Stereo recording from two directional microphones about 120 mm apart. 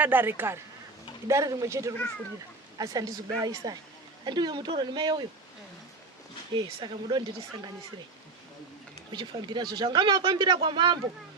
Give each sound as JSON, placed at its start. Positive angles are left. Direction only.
{"t": 0.0, "sound": "speech", "side_deg": -15}
{"t": 6.5, "sound": "speech", "side_deg": -40}
{"t": 9.1, "sound": "speech", "side_deg": -40}